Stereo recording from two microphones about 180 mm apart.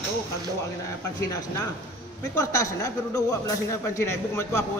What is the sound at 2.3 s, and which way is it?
A man's voice, 15° left (ahead or behind).